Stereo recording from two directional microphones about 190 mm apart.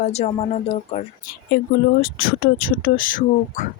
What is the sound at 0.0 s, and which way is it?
Speech, 35° left (ahead or behind).